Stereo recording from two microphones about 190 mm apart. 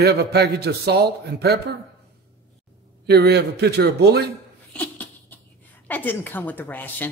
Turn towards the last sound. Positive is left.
turn(degrees=10)  # may be behind; listen again after turning